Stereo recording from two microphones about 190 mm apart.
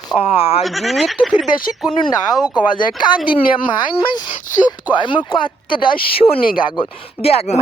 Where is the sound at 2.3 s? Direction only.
20° left (ahead or behind).